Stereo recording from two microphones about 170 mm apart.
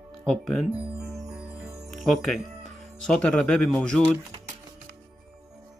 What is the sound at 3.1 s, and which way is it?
Speech, 5° left (ahead or behind).